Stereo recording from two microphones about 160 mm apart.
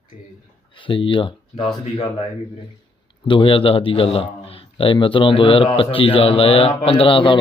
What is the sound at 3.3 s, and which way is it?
A man's voice, 35° left (ahead or behind).